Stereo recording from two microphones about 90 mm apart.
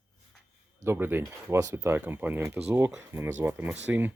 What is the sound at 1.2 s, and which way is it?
Speech, 35° right (ahead or behind).